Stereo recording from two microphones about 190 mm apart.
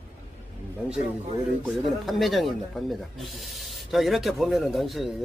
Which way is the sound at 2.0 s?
Centre (ahead or behind).